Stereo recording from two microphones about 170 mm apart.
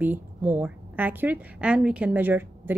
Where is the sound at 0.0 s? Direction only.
10° right (ahead or behind).